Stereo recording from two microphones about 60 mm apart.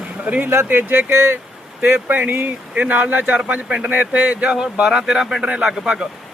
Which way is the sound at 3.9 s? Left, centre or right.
Right.